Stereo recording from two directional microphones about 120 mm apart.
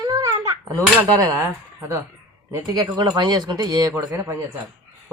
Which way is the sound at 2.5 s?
30° right (ahead or behind).